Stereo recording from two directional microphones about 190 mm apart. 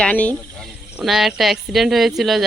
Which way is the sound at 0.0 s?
5° left (ahead or behind).